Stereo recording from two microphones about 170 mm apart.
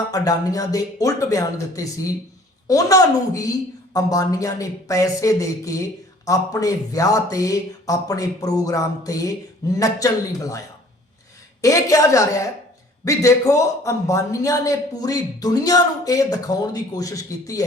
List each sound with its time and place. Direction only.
0.1 s a man's voice: 20° left (ahead or behind)
11.6 s a man's voice: 20° left (ahead or behind)